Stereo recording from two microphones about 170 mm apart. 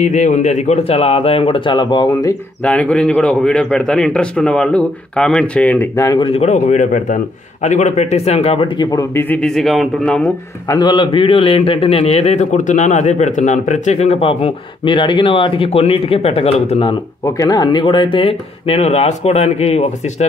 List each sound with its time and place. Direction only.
0.0 s a man's voice: 45° left (ahead or behind); by 2.3 s 20° left (ahead or behind)
2.6 s a man's voice: 5° left (ahead or behind)
6.1 s a man's voice: 35° left (ahead or behind); by 10.3 s 5° left (ahead or behind)
10.7 s a man's voice: 25° left (ahead or behind)
17.2 s a man's voice: 20° left (ahead or behind); by 20.2 s 40° left (ahead or behind)